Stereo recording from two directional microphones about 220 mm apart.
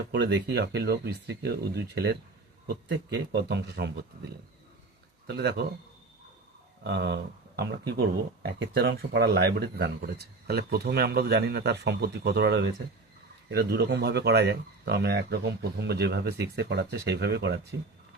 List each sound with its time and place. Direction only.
0.1 s speech: 50° right (ahead or behind)
5.2 s speech: 50° right (ahead or behind)
6.8 s speech: 50° right (ahead or behind)